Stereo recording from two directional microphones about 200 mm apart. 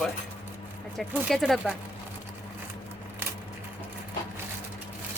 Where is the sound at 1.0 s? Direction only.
Centre (ahead or behind).